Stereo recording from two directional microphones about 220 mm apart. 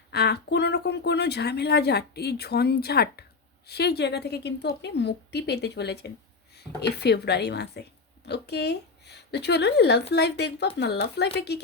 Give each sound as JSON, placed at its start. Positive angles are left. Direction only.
{"t": 0.1, "sound": "speech", "side_deg": 50}